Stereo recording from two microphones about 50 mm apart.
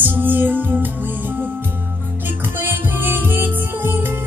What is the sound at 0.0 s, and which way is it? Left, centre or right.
Music, right.